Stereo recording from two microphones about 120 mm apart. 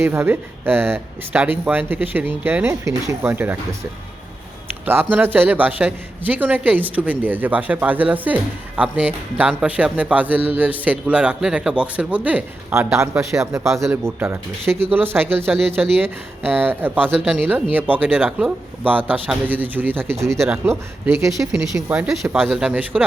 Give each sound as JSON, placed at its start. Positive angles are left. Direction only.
{"t": 0.0, "sound": "speech", "side_deg": -20}
{"t": 4.9, "sound": "speech", "side_deg": -15}
{"t": 21.8, "sound": "speech", "side_deg": -15}
{"t": 22.1, "sound": "speech", "side_deg": 0}